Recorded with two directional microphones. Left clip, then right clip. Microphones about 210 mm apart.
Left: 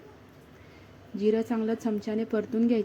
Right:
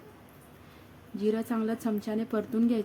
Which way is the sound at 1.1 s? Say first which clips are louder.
Left 4 dB; centre (ahead or behind).